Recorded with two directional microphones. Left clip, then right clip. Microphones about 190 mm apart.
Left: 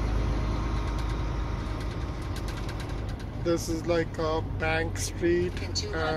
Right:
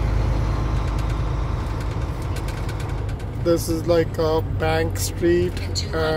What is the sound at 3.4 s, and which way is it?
Speech, 15° right (ahead or behind).